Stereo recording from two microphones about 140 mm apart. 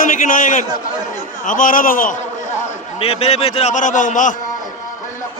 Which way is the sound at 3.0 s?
45° left (ahead or behind).